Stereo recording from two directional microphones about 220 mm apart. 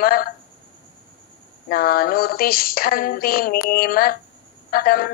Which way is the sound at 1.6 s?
40° left (ahead or behind).